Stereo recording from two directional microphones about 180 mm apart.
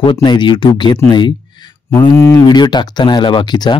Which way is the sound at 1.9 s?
15° left (ahead or behind).